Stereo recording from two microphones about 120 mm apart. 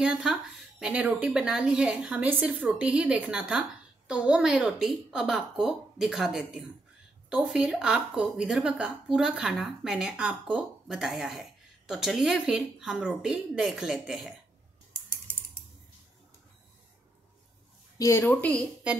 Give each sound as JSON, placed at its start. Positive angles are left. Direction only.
{"t": 0.0, "sound": "a woman's voice", "side_deg": -5}
{"t": 17.9, "sound": "speech", "side_deg": 25}
{"t": 18.9, "sound": "a woman's voice", "side_deg": -10}